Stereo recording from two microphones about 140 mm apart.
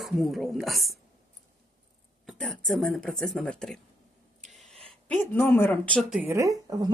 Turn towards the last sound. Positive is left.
turn(degrees=-25)  # may be behind; listen again after turning